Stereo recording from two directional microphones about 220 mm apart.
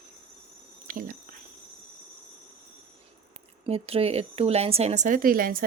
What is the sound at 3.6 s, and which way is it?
A woman's voice, 25° right (ahead or behind).